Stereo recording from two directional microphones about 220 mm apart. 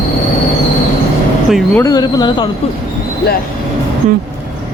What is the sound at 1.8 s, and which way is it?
Speech, 15° left (ahead or behind).